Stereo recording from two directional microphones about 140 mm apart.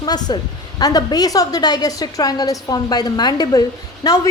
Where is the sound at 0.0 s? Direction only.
30° left (ahead or behind).